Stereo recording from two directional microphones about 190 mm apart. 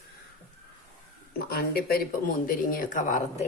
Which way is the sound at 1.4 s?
55° left (ahead or behind).